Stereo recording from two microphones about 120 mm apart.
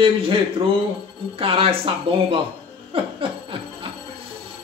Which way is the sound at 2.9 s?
50° right (ahead or behind).